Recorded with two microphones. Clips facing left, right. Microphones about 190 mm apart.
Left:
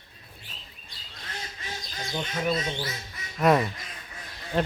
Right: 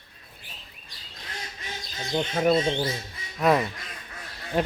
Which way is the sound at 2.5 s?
30° right (ahead or behind).